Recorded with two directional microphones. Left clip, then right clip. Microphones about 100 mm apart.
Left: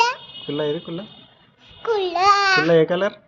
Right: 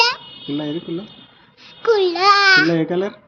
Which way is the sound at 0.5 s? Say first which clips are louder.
Left 1 dB; 60° left (ahead or behind).